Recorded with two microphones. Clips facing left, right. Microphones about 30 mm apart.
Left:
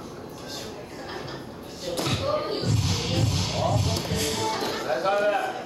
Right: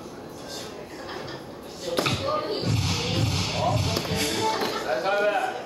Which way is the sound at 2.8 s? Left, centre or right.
Centre.